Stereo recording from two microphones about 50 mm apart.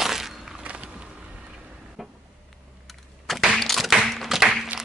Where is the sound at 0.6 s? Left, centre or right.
Right.